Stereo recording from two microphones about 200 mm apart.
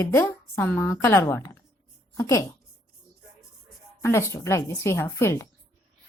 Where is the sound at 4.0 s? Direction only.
15° left (ahead or behind).